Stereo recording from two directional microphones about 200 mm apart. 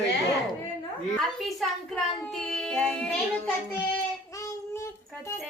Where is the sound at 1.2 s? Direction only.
Centre (ahead or behind).